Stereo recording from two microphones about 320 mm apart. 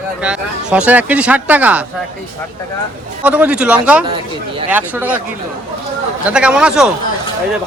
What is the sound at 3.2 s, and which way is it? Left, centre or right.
Speech, centre.